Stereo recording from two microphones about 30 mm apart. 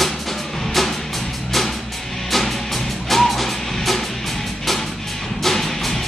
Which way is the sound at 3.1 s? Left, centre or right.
Centre.